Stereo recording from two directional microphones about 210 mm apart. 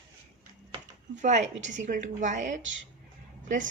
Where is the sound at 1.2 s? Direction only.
35° right (ahead or behind).